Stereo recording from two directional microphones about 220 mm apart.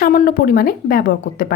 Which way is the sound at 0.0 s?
45° left (ahead or behind).